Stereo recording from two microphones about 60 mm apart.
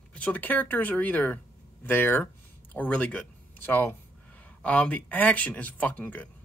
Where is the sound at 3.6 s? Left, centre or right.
Left.